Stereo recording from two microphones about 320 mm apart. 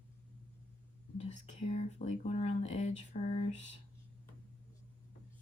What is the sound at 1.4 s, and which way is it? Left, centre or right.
Speech, left.